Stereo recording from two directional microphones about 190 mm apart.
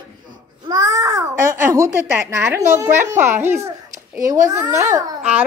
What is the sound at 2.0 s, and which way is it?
A child's voice, 10° right (ahead or behind).